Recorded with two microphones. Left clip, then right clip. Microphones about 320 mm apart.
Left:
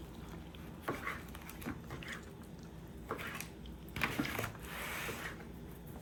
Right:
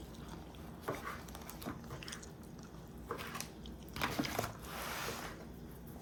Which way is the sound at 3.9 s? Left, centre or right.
Right.